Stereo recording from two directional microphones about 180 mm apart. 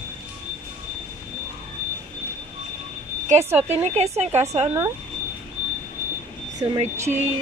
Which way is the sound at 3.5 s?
35° right (ahead or behind).